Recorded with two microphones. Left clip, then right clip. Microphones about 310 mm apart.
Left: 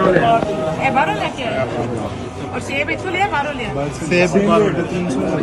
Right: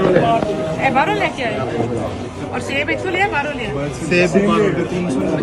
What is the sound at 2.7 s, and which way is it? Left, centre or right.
Speech, centre.